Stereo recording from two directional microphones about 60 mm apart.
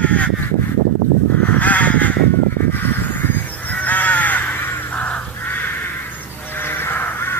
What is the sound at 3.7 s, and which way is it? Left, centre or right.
Crow, left.